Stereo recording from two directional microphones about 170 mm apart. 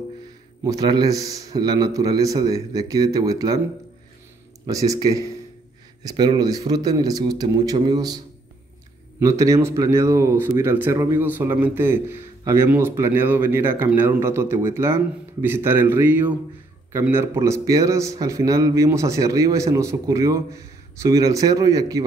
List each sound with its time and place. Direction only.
0.7 s a man's voice: 25° right (ahead or behind)
4.6 s a man's voice: 20° right (ahead or behind)
9.2 s a man's voice: 20° right (ahead or behind)